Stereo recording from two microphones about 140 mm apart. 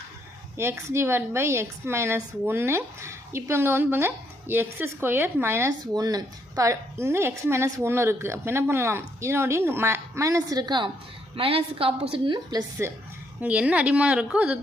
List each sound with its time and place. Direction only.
0.5 s a woman's voice: 20° right (ahead or behind)
13.4 s a woman's voice: 10° right (ahead or behind)